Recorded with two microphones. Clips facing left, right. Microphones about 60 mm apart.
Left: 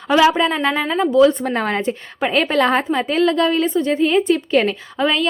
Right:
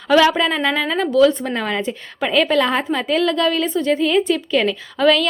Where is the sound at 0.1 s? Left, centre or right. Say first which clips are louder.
Even; centre.